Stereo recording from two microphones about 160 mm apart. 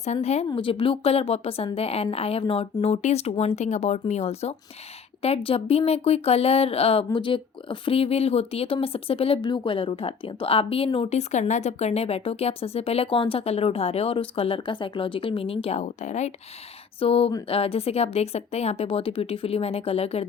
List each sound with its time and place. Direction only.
0.0 s speech: 45° left (ahead or behind)